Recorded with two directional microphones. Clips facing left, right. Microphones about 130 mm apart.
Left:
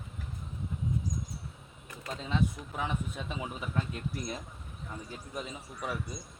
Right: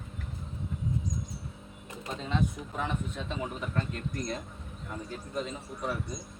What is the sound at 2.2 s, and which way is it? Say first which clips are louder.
Speech: even; 5° left (ahead or behind).